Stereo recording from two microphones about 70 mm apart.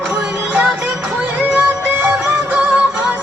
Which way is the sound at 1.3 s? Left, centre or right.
Right.